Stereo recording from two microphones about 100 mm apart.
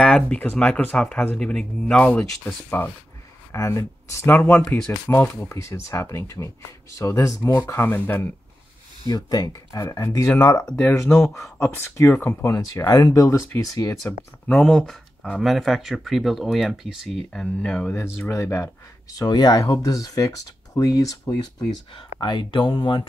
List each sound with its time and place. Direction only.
0.0 s speech: 10° left (ahead or behind)
3.5 s speech: 30° left (ahead or behind)
9.0 s speech: 40° left (ahead or behind)
10.0 s speech: 25° left (ahead or behind)
10.6 s speech: 15° left (ahead or behind)
11.0 s speech: 30° left (ahead or behind)
12.4 s speech: 35° left (ahead or behind)
14.6 s speech: 5° left (ahead or behind)
18.3 s speech: 30° left (ahead or behind)
21.9 s speech: 50° left (ahead or behind)